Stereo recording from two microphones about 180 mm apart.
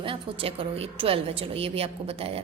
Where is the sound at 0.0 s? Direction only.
30° right (ahead or behind).